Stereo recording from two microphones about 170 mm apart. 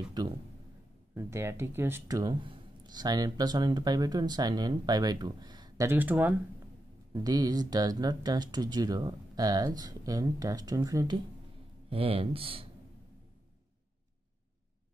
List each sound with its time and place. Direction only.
0.2 s speech: 25° right (ahead or behind)
5.9 s speech: 10° right (ahead or behind)
7.1 s speech: 25° right (ahead or behind)
11.9 s speech: 35° right (ahead or behind)